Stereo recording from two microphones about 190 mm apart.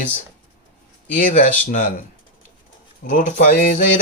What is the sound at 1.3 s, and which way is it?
Speech, 40° left (ahead or behind).